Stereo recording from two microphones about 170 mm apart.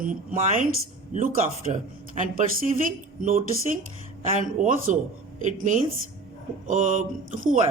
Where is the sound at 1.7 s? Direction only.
45° right (ahead or behind).